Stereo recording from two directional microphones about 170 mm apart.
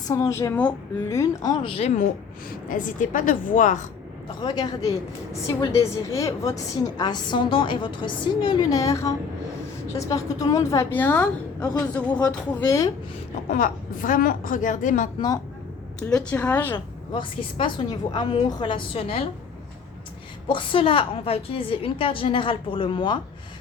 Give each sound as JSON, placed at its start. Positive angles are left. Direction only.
{"t": 0.1, "sound": "a woman's voice", "side_deg": 15}
{"t": 2.6, "sound": "a woman's voice", "side_deg": 50}
{"t": 4.4, "sound": "a woman's voice", "side_deg": 25}
{"t": 13.5, "sound": "a woman's voice", "side_deg": 50}
{"t": 16.0, "sound": "a woman's voice", "side_deg": 5}
{"t": 16.7, "sound": "a woman's voice", "side_deg": 30}
{"t": 20.5, "sound": "a woman's voice", "side_deg": 30}